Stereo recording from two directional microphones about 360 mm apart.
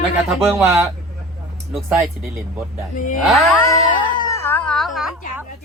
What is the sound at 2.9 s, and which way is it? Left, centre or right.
Speech, left.